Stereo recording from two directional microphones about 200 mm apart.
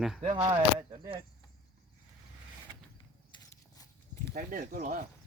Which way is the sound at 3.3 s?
20° left (ahead or behind).